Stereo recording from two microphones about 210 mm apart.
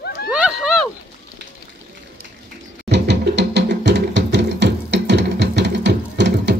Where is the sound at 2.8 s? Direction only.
55° right (ahead or behind).